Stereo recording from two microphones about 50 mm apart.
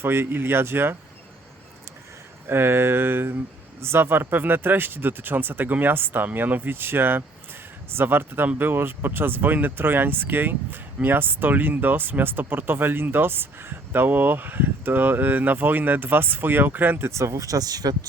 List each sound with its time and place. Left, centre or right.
0.0 s speech: right
2.5 s speech: right
17.0 s speech: right